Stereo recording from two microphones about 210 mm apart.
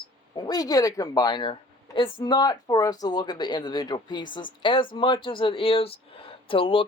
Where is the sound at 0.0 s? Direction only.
20° left (ahead or behind).